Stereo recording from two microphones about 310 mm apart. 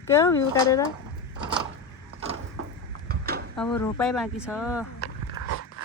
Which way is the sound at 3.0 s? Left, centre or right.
Right.